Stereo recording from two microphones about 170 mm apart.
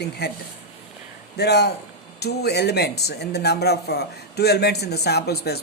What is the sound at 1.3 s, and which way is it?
Speech, 75° left (ahead or behind).